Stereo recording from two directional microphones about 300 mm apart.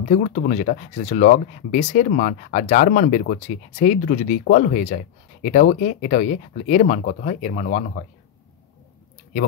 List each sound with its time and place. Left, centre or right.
0.1 s speech: left